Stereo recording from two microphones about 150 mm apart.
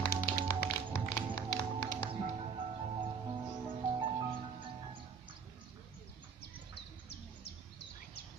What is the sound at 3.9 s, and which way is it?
Music, 35° right (ahead or behind).